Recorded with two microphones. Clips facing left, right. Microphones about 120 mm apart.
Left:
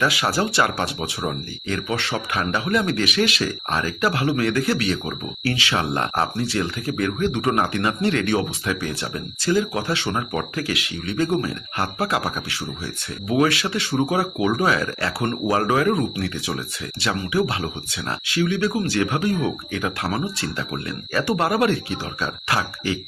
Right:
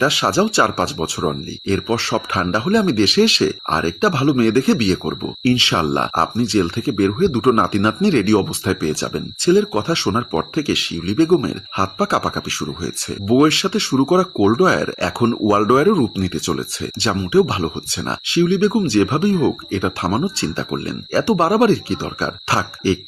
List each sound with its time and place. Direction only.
0.0 s speech: 30° right (ahead or behind)